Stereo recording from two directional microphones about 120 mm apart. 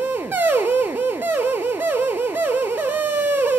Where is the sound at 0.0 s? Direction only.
15° right (ahead or behind).